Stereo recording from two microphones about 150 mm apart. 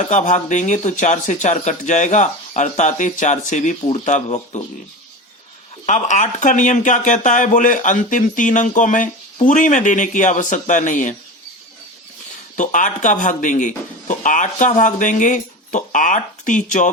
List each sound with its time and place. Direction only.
0.1 s speech: 55° left (ahead or behind)
5.8 s speech: 55° left (ahead or behind)
12.5 s speech: 60° left (ahead or behind)